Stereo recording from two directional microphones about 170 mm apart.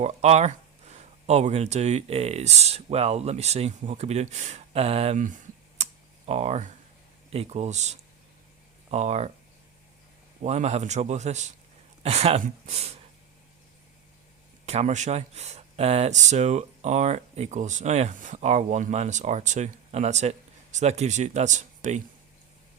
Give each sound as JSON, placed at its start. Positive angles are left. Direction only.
{"t": 0.0, "sound": "speech", "side_deg": -40}
{"t": 5.7, "sound": "computer keyboard", "side_deg": -40}
{"t": 7.3, "sound": "speech", "side_deg": -35}
{"t": 10.4, "sound": "speech", "side_deg": -40}
{"t": 14.7, "sound": "speech", "side_deg": -40}